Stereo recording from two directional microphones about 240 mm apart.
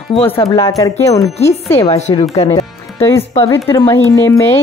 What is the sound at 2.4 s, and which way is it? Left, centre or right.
Music, centre.